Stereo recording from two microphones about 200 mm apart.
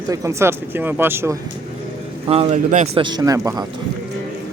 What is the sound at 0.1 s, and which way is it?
Speech, 15° right (ahead or behind).